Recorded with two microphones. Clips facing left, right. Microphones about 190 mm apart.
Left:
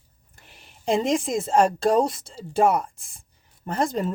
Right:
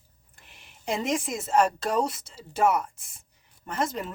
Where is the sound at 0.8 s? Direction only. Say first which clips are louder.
Left 6 dB; 30° left (ahead or behind).